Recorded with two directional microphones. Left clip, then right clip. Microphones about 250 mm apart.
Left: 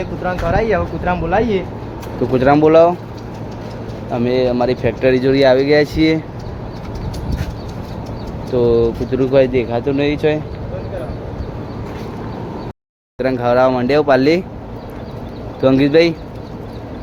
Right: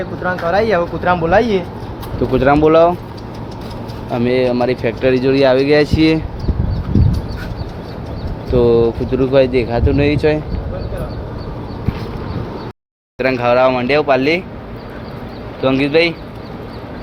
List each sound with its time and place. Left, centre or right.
0.5 s speech: right
2.3 s speech: centre
4.1 s speech: centre
8.5 s speech: centre
13.1 s speech: centre; by 14.4 s left
15.6 s speech: left